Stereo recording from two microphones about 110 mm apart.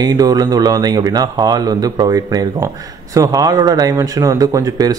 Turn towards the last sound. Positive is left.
turn(degrees=-35)  # may be behind; listen again after turning